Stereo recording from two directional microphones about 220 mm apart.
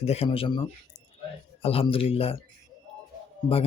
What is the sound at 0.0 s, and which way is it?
Speech, 25° left (ahead or behind).